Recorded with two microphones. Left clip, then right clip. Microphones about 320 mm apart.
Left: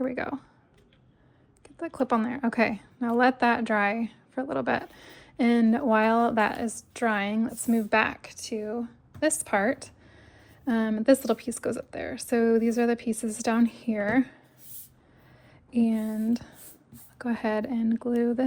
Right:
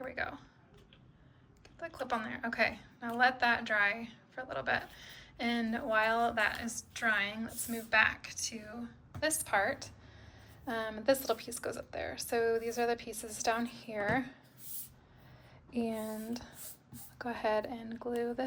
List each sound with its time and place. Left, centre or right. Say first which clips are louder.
0.0 s speech: left 8 dB; centre
1.6 s a woman's voice: left 11 dB; centre
15.7 s a woman's voice: left 9 dB; left